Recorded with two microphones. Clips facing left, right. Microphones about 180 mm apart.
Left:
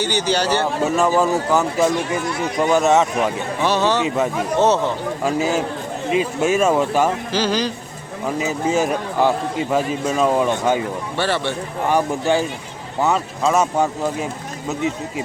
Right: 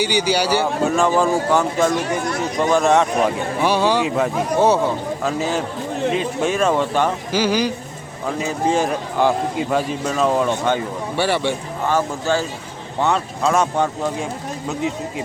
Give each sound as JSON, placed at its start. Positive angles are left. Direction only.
{"t": 0.0, "sound": "speech", "side_deg": -10}
{"t": 0.9, "sound": "speech", "side_deg": 5}
{"t": 3.6, "sound": "speech", "side_deg": -10}
{"t": 5.2, "sound": "a man's voice", "side_deg": 10}
{"t": 7.3, "sound": "speech", "side_deg": -10}
{"t": 8.4, "sound": "a man's voice", "side_deg": 5}
{"t": 11.2, "sound": "speech", "side_deg": -15}
{"t": 11.9, "sound": "a man's voice", "side_deg": 15}
{"t": 13.0, "sound": "speech", "side_deg": 5}